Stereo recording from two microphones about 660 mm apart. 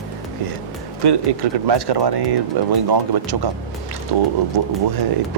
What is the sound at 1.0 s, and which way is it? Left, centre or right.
Speech, right.